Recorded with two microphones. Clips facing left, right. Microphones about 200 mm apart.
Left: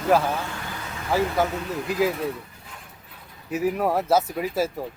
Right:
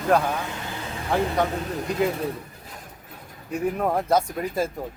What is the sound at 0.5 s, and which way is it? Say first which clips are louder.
Vehicle: right 2 dB; 25° right (ahead or behind).